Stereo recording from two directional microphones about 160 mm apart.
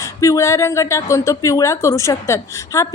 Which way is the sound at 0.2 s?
20° left (ahead or behind).